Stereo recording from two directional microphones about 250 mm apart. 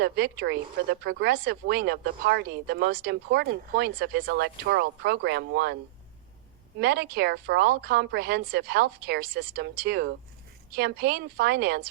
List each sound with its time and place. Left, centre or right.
0.0 s speech: right
6.7 s speech: right